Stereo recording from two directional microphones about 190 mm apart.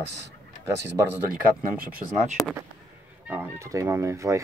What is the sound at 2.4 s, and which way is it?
Speech, 20° left (ahead or behind).